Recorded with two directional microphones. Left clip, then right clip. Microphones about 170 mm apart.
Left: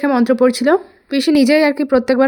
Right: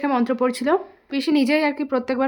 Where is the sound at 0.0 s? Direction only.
30° left (ahead or behind).